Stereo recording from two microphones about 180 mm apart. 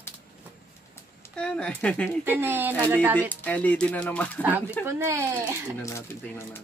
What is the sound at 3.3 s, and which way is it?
Speech, 10° left (ahead or behind).